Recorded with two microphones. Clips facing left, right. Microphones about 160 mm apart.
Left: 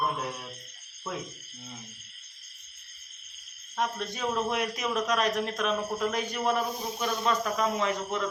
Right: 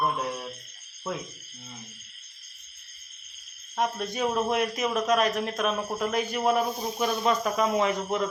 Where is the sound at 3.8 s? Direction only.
15° right (ahead or behind).